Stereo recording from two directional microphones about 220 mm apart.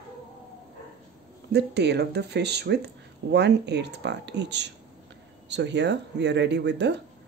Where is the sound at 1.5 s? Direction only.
50° right (ahead or behind).